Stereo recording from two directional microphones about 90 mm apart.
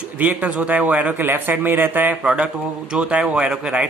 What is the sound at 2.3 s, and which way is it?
A man's voice, 10° right (ahead or behind).